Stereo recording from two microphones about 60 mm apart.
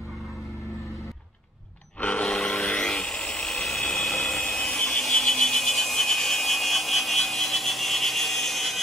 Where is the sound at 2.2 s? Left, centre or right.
Centre.